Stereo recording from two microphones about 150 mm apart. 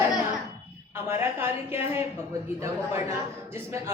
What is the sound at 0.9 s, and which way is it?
A woman's voice, 15° right (ahead or behind).